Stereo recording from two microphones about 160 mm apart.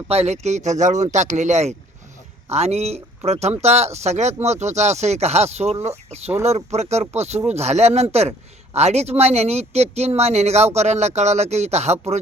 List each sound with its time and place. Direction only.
0.1 s a man's voice: 45° right (ahead or behind)